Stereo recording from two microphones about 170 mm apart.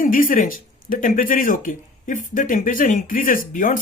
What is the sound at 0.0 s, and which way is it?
Speech, 55° left (ahead or behind).